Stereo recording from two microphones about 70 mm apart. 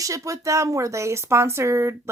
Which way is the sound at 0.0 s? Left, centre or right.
Right.